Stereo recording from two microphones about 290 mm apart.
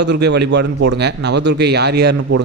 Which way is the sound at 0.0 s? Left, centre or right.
Right.